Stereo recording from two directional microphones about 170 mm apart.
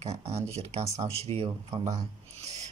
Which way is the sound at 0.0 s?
40° right (ahead or behind).